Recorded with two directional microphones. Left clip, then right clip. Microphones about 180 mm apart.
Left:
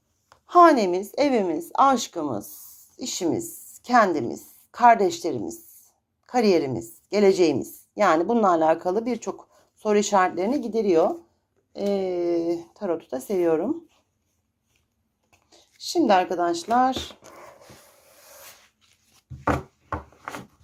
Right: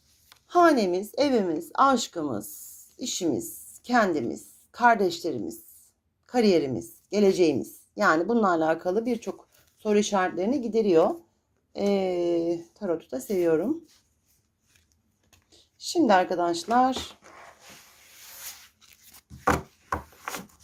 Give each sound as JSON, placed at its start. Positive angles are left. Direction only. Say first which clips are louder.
{"t": 0.4, "sound": "a woman's voice", "louder": "left 5 dB", "side_deg": 0}
{"t": 15.4, "sound": "speech", "louder": "left 2 dB", "side_deg": -10}
{"t": 18.8, "sound": "chopping", "louder": "right 6 dB", "side_deg": -60}